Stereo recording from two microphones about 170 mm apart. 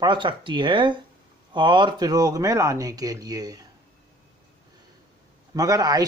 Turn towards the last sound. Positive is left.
turn(degrees=-20)  # may be behind; listen again after turning